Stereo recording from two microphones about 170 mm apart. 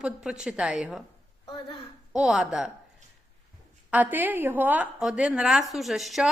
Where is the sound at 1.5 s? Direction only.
25° left (ahead or behind).